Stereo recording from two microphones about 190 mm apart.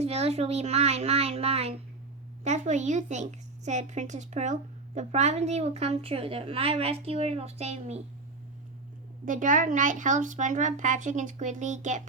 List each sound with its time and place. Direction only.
0.0 s a woman's voice: 35° right (ahead or behind)
9.2 s a woman's voice: 45° right (ahead or behind)